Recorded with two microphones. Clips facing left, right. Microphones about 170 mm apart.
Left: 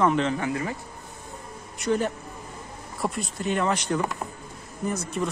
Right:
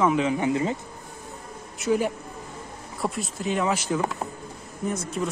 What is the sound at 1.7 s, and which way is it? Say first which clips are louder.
A man's voice: right 1 dB; 5° right (ahead or behind).